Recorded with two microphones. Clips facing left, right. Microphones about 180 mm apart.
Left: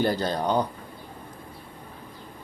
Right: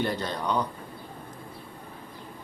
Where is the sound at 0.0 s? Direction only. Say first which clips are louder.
Left 5 dB; 35° left (ahead or behind).